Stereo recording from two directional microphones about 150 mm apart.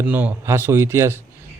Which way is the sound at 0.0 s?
10° right (ahead or behind).